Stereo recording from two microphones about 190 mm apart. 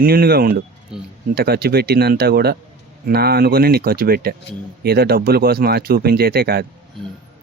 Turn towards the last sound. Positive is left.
turn(degrees=-55)  # may be behind; listen again after turning